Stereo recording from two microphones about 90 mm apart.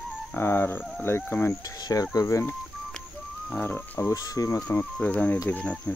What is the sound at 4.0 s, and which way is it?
Speech, 40° left (ahead or behind).